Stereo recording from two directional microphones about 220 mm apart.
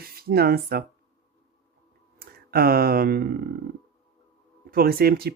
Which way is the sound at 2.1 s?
45° right (ahead or behind).